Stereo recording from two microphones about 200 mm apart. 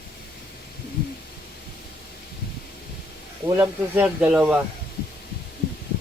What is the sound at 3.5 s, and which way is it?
Speech, 10° right (ahead or behind).